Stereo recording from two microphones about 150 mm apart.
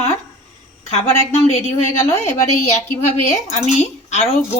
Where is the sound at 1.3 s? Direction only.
45° left (ahead or behind).